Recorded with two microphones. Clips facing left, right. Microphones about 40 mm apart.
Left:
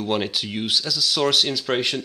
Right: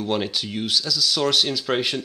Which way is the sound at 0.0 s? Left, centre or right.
Centre.